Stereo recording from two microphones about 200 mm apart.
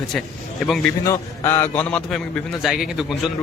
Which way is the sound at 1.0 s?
15° left (ahead or behind).